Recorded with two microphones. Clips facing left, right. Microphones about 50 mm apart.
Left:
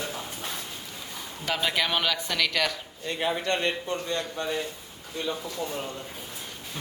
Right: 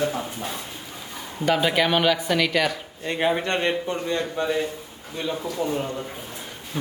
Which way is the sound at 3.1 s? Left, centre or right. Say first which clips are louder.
Right 4 dB; right.